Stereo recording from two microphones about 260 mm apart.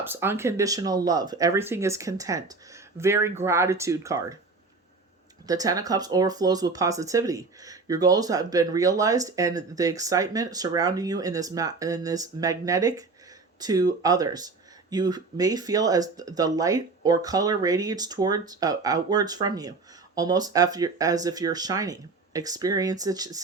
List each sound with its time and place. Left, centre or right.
0.0 s speech: centre
5.5 s speech: centre